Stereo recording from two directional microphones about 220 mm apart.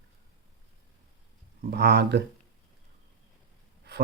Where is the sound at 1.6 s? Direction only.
45° right (ahead or behind).